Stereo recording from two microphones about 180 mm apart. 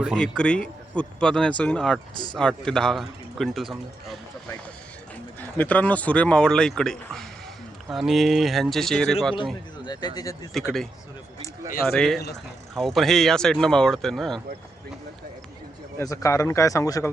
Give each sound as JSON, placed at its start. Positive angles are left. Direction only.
{"t": 0.0, "sound": "speech", "side_deg": 5}
{"t": 5.4, "sound": "speech", "side_deg": 10}
{"t": 9.7, "sound": "a sound", "side_deg": 25}
{"t": 10.2, "sound": "speech", "side_deg": 20}
{"t": 10.5, "sound": "speech", "side_deg": 0}
{"t": 11.9, "sound": "speech", "side_deg": 5}
{"t": 16.0, "sound": "speech", "side_deg": 15}